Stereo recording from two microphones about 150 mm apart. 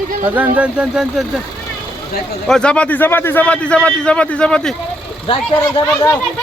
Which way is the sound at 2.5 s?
5° left (ahead or behind).